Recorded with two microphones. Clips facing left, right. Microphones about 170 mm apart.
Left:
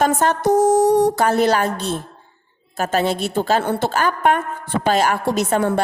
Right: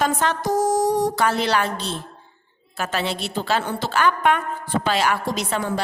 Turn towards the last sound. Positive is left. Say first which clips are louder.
# left 6 dB
turn(degrees=55)  # may be behind; listen again after turning